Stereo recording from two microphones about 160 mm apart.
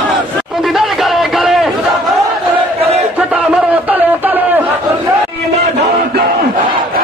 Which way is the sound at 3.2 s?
10° right (ahead or behind).